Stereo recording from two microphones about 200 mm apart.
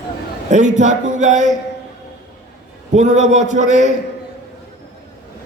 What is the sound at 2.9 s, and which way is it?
A man's voice, 35° right (ahead or behind).